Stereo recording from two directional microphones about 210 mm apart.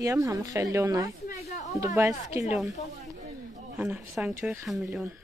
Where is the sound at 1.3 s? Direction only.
35° left (ahead or behind).